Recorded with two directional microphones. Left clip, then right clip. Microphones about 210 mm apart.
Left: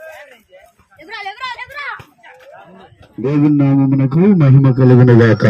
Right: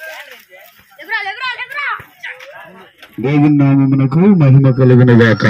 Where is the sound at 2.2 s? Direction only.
40° left (ahead or behind).